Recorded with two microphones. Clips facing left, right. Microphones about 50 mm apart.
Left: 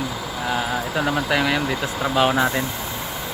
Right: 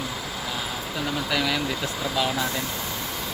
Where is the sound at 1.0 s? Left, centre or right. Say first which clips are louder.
Left 4 dB; left.